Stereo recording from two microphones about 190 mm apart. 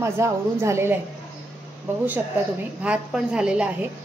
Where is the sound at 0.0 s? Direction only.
15° right (ahead or behind).